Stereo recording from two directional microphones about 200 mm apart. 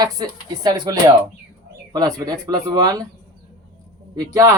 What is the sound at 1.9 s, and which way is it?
Speech, 20° right (ahead or behind).